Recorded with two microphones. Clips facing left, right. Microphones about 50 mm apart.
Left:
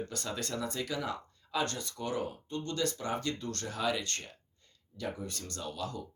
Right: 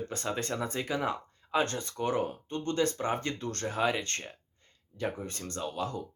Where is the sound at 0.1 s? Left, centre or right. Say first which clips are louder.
Right 4 dB; right.